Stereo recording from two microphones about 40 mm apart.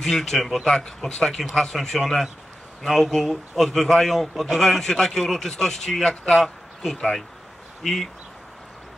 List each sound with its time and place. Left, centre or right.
0.0 s a man's voice: centre
0.7 s a man's voice: centre